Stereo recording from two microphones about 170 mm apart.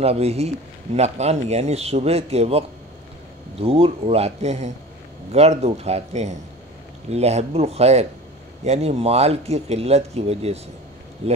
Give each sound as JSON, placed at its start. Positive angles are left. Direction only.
{"t": 0.0, "sound": "speech", "side_deg": -35}